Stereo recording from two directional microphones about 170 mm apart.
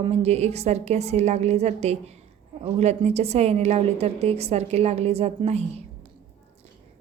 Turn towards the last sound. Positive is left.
turn(degrees=-40)  # may be behind; listen again after turning